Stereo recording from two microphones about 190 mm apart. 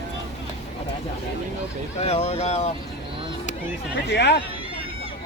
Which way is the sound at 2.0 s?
35° left (ahead or behind).